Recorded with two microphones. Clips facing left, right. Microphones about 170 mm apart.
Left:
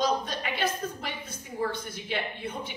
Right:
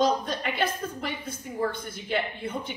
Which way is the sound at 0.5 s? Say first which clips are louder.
Right 1 dB; 55° right (ahead or behind).